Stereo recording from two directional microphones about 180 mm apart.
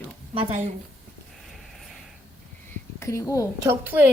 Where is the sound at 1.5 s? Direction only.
Centre (ahead or behind).